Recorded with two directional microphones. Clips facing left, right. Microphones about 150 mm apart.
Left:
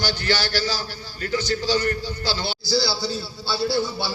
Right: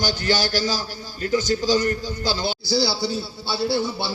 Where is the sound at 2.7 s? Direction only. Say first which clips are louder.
Right 1 dB; 20° right (ahead or behind).